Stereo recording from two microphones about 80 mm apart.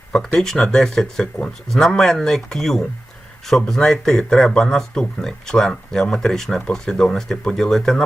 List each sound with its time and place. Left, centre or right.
0.1 s speech: centre